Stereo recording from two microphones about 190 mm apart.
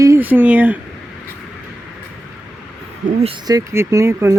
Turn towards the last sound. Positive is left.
turn(degrees=-15)  # may be behind; listen again after turning